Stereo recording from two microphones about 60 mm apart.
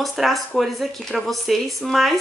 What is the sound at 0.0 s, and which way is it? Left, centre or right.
Speech, centre.